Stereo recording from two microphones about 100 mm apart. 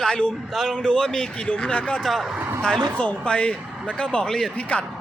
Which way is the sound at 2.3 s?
20° right (ahead or behind).